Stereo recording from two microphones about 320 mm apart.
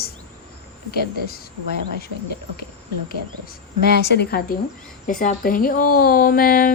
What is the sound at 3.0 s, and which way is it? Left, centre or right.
Speech, left.